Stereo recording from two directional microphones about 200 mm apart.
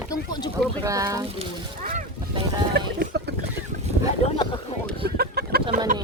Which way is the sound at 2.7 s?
55° right (ahead or behind).